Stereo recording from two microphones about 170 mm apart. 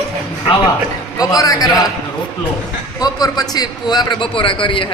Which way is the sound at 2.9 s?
20° left (ahead or behind).